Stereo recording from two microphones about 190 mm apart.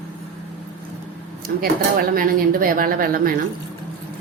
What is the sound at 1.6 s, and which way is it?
Speech, 50° right (ahead or behind).